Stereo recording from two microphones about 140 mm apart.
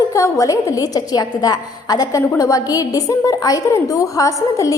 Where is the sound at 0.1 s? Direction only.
25° left (ahead or behind).